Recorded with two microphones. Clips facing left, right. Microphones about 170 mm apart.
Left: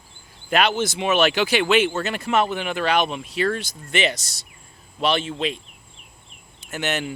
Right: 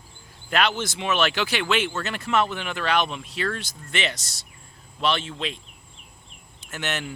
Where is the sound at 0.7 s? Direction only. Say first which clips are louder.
Left 6 dB; 45° left (ahead or behind).